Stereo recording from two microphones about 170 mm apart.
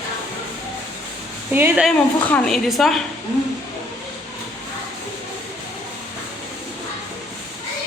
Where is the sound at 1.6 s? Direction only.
10° right (ahead or behind).